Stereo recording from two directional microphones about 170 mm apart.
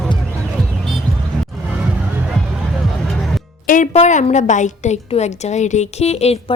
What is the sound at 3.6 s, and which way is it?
A woman's voice, 50° left (ahead or behind).